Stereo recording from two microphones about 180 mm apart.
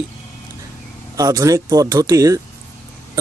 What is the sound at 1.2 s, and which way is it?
Speech, 20° right (ahead or behind).